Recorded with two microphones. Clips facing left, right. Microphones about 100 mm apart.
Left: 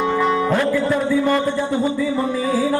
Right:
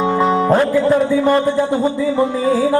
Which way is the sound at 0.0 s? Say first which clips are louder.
Right 3 dB; 20° right (ahead or behind).